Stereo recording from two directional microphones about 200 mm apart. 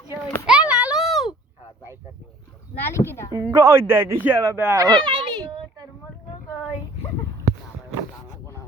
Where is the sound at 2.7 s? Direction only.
10° left (ahead or behind).